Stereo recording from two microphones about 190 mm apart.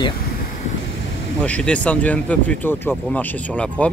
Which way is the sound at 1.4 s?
5° left (ahead or behind).